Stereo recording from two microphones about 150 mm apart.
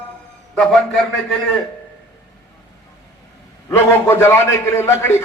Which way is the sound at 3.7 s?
15° left (ahead or behind).